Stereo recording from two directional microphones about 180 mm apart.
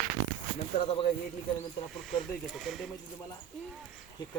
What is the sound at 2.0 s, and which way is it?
Speech, centre (ahead or behind).